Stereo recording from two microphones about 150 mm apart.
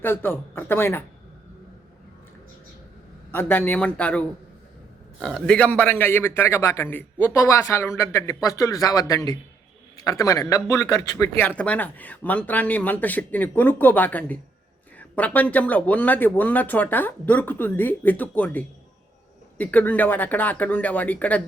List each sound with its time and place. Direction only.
0.0 s a man's voice: 15° left (ahead or behind)
3.3 s a man's voice: 10° left (ahead or behind)
5.2 s a man's voice: 5° left (ahead or behind); by 11.3 s 20° left (ahead or behind)
11.3 s a man's voice: 10° left (ahead or behind)